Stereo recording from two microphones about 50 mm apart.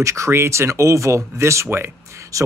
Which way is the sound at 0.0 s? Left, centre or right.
Right.